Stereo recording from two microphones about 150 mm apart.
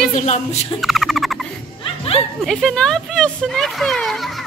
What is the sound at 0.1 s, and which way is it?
Speech, 50° left (ahead or behind).